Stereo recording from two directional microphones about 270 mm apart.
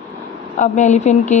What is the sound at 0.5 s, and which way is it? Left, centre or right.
Speech, left.